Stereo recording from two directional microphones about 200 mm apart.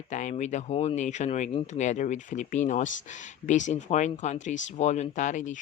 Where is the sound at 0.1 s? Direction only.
40° left (ahead or behind).